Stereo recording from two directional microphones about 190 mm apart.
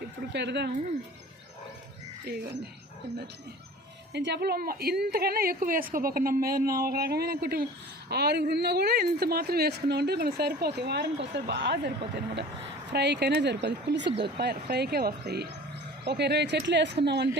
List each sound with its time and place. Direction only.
0.3 s a woman's voice: 65° right (ahead or behind)
2.2 s a woman's voice: 55° right (ahead or behind)
4.1 s a woman's voice: 60° right (ahead or behind)